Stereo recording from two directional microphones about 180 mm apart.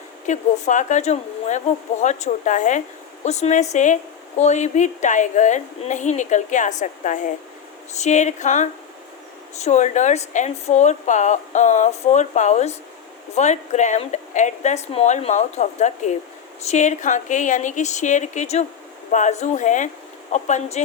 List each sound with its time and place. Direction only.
0.3 s a woman's voice: 40° left (ahead or behind)